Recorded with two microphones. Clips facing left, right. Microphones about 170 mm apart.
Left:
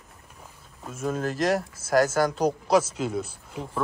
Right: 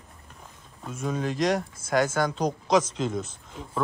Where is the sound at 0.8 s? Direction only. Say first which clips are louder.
Left 1 dB; 5° left (ahead or behind).